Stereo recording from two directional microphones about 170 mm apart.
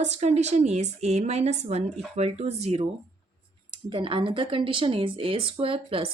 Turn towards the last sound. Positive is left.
turn(degrees=-30)  # may be behind; listen again after turning